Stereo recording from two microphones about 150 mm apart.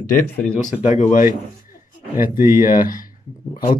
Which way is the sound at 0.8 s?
50° left (ahead or behind).